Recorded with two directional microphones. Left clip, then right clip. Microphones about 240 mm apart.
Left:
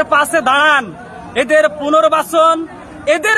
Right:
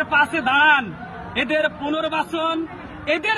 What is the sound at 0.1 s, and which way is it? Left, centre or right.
Speech, centre.